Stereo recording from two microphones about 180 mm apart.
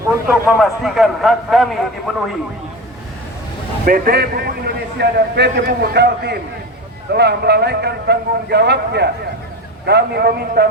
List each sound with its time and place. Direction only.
0.6 s a man's voice: centre (ahead or behind)
3.8 s a man's voice: 55° right (ahead or behind)